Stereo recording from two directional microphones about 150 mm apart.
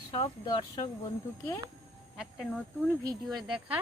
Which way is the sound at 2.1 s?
Centre (ahead or behind).